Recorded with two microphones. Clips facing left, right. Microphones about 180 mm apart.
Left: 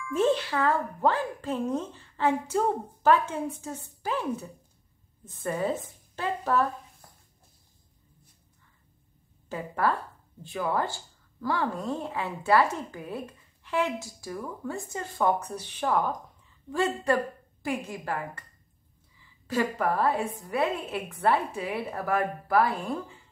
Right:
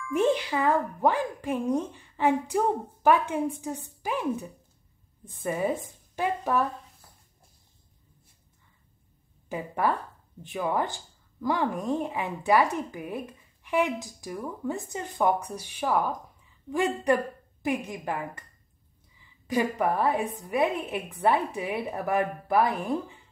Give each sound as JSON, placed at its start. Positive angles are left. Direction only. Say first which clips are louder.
{"t": 0.1, "sound": "a woman's voice", "louder": "even", "side_deg": -15}
{"t": 9.5, "sound": "a woman's voice", "louder": "even", "side_deg": -15}
{"t": 19.4, "sound": "a woman's voice", "louder": "right 1 dB", "side_deg": -15}